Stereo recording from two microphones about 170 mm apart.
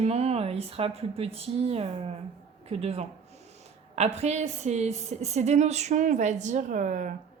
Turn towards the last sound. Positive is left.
turn(degrees=-45)  # may be behind; listen again after turning